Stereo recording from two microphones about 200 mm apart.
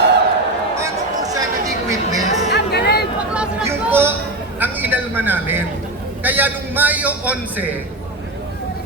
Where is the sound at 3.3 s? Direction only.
10° right (ahead or behind).